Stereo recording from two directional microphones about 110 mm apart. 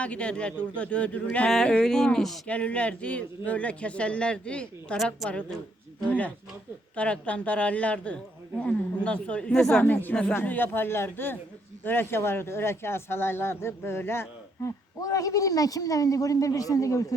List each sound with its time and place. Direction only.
0.0 s speech: 10° left (ahead or behind)
15.0 s speech: 30° left (ahead or behind)